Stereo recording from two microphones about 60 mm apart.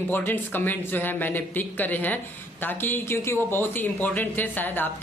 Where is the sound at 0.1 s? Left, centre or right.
Left.